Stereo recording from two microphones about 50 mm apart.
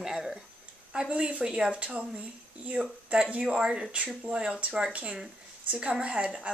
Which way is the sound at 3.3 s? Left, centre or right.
Right.